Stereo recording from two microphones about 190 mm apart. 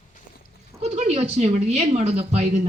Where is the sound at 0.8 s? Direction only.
35° right (ahead or behind).